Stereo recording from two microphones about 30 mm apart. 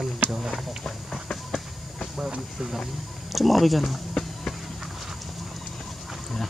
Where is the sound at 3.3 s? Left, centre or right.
Centre.